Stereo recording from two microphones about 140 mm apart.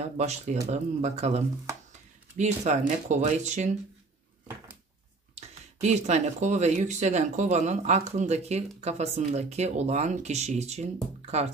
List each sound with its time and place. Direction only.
0.2 s speech: 55° right (ahead or behind)
5.3 s speech: 55° right (ahead or behind)